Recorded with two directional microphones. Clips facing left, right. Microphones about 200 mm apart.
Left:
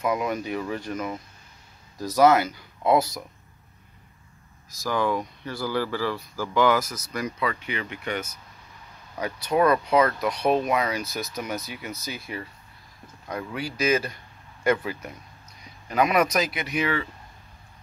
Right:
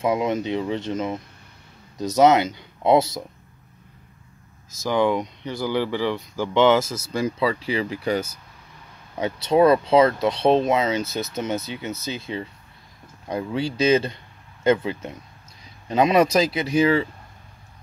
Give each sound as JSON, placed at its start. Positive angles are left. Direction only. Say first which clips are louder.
{"t": 0.0, "sound": "speech", "louder": "right 4 dB", "side_deg": -25}
{"t": 4.6, "sound": "speech", "louder": "right 5 dB", "side_deg": -20}